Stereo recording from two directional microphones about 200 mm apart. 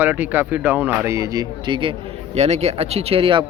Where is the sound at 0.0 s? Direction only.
10° right (ahead or behind).